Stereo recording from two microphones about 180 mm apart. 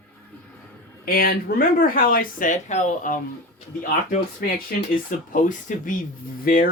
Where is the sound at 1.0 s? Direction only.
55° left (ahead or behind).